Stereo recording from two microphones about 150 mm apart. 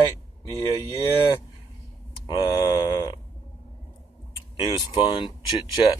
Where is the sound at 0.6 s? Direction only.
20° left (ahead or behind).